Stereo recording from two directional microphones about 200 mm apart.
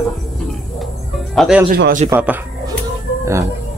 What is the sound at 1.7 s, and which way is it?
Speech, 45° right (ahead or behind).